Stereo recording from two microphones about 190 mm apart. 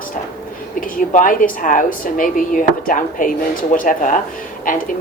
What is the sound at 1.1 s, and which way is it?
A woman's voice, 45° left (ahead or behind).